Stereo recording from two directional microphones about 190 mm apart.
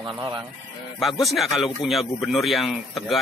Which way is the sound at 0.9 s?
Centre (ahead or behind).